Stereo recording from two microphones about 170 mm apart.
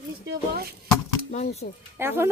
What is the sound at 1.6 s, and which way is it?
Speech, 55° left (ahead or behind).